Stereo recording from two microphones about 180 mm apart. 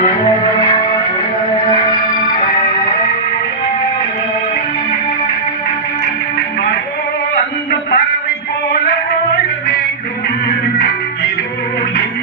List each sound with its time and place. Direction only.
7.7 s music: 60° left (ahead or behind)